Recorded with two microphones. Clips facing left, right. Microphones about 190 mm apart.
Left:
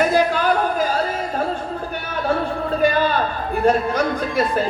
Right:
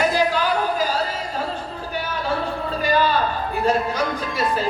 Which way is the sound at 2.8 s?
55° left (ahead or behind).